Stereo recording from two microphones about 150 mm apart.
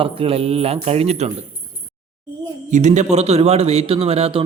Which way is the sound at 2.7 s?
50° right (ahead or behind).